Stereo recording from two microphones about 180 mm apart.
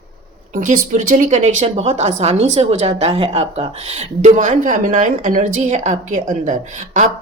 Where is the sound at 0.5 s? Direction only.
45° right (ahead or behind).